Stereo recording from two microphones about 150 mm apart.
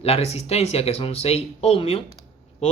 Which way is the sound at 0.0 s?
40° left (ahead or behind).